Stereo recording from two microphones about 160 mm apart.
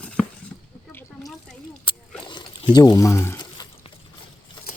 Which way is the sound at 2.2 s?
30° left (ahead or behind).